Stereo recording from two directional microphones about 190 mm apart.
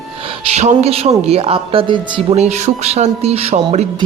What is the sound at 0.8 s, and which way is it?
Speech, 35° right (ahead or behind).